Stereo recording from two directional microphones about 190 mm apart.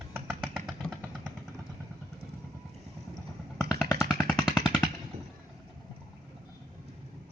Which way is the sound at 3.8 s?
20° left (ahead or behind).